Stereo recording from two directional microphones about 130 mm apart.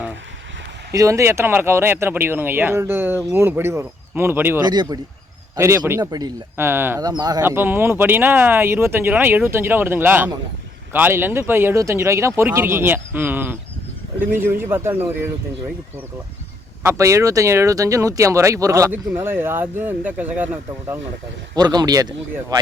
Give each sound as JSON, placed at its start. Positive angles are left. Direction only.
{"t": 0.9, "sound": "speech", "side_deg": -25}
{"t": 4.6, "sound": "speech", "side_deg": -30}
{"t": 5.5, "sound": "speech", "side_deg": -20}
{"t": 6.6, "sound": "speech", "side_deg": -20}
{"t": 7.0, "sound": "speech", "side_deg": -30}
{"t": 7.4, "sound": "speech", "side_deg": -15}
{"t": 17.0, "sound": "speech", "side_deg": -25}
{"t": 21.5, "sound": "speech", "side_deg": -30}